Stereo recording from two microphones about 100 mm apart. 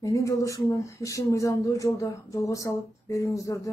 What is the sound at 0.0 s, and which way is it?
Speech, 35° left (ahead or behind).